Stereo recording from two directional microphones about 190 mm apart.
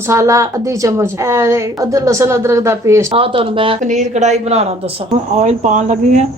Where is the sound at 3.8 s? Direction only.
40° right (ahead or behind).